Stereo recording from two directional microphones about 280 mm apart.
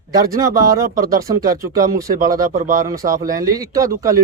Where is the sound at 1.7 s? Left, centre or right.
Centre.